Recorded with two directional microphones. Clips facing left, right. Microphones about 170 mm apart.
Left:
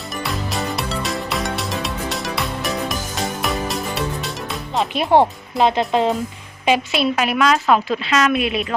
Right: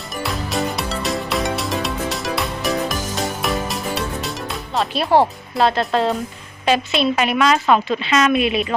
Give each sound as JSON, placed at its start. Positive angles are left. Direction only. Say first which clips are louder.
{"t": 0.2, "sound": "music", "louder": "right 3 dB", "side_deg": 0}
{"t": 4.8, "sound": "a woman's voice", "louder": "left 1 dB", "side_deg": 15}